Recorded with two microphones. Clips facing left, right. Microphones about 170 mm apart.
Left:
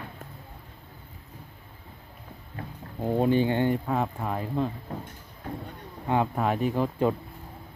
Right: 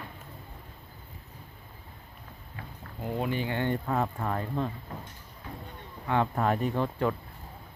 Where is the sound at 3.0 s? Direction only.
30° left (ahead or behind).